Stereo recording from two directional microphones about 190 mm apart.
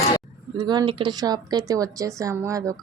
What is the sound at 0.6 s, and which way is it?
A woman's voice, 25° right (ahead or behind).